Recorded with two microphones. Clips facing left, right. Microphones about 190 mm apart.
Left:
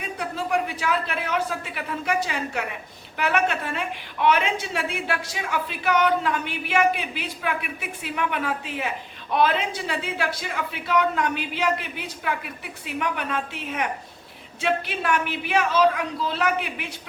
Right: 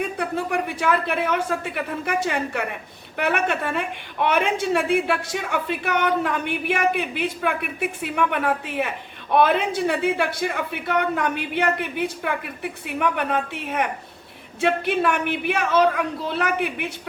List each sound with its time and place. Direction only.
0.0 s a woman's voice: 55° right (ahead or behind)